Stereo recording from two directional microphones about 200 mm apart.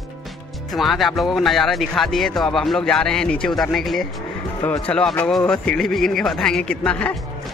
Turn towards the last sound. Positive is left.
turn(degrees=5)  # may be behind; listen again after turning